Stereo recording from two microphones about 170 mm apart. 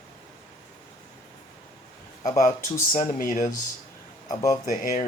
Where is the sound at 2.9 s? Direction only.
50° left (ahead or behind).